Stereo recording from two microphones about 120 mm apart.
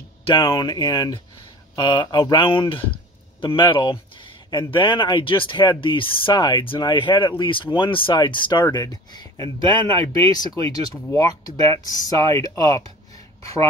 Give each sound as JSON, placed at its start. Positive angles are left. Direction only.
{"t": 0.2, "sound": "speech", "side_deg": 45}
{"t": 9.6, "sound": "speech", "side_deg": -45}
{"t": 10.3, "sound": "speech", "side_deg": 30}
{"t": 11.5, "sound": "speech", "side_deg": -55}
{"t": 12.1, "sound": "speech", "side_deg": 30}